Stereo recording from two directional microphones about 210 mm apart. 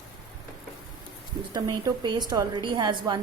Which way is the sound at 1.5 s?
20° right (ahead or behind).